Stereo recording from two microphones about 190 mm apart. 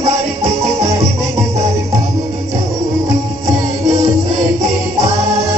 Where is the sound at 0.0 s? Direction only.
15° right (ahead or behind).